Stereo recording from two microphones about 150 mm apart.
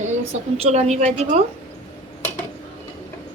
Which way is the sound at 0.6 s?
45° right (ahead or behind).